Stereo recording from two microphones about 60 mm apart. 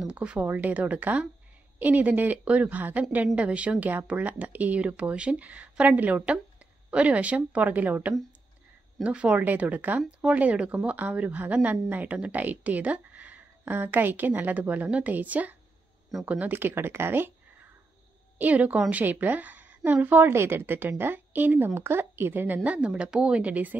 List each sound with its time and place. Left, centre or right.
0.0 s speech: centre
0.5 s a woman's voice: right
18.4 s speech: right
20.2 s speech: right
22.6 s speech: right